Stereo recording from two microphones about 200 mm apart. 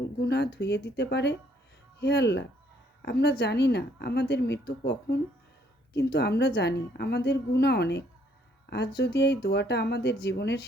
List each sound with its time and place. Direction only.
0.2 s a woman's voice: 55° left (ahead or behind)